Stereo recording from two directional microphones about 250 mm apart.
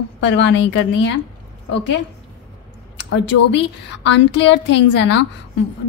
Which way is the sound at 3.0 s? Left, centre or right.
Left.